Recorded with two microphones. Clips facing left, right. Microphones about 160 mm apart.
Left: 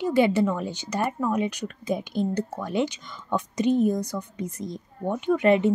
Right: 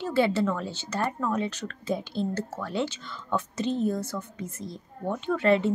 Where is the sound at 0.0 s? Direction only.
15° left (ahead or behind).